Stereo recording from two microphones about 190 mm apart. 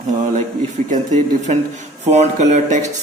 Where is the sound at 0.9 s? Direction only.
40° right (ahead or behind).